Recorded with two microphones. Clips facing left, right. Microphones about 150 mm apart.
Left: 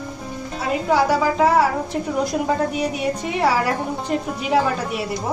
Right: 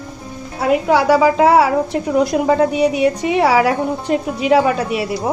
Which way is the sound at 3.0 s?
85° right.